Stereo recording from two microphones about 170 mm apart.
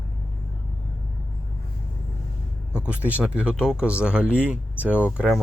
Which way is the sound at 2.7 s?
10° right (ahead or behind).